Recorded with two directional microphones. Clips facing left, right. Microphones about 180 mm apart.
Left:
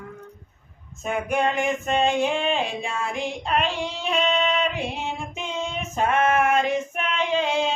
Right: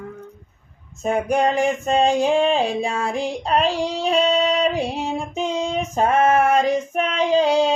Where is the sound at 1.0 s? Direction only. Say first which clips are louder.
Right 5 dB; 35° right (ahead or behind).